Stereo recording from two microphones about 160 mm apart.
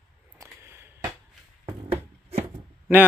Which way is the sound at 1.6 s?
40° right (ahead or behind).